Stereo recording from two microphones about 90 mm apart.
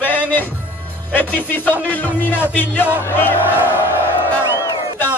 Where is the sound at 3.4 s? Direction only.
20° right (ahead or behind).